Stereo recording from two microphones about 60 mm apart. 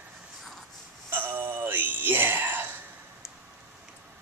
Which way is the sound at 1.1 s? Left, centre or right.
Right.